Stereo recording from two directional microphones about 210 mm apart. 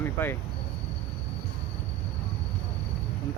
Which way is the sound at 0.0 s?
10° left (ahead or behind).